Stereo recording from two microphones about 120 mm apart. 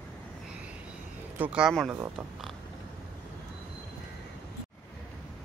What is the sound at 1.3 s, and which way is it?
Speech, 10° right (ahead or behind).